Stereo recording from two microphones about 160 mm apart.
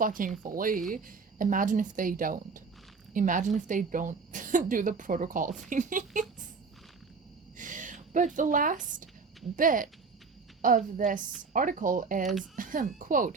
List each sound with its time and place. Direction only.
0.0 s a woman's voice: 60° right (ahead or behind)
7.5 s a sound: 55° right (ahead or behind)
9.6 s speech: 55° right (ahead or behind)
12.2 s speech: centre (ahead or behind)
12.5 s speech: 55° right (ahead or behind)